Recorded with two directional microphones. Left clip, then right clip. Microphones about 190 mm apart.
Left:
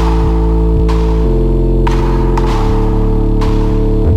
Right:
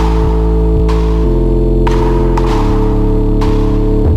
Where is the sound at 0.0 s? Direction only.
Centre (ahead or behind).